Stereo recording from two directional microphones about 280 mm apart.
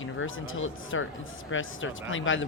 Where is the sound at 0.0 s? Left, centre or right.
Left.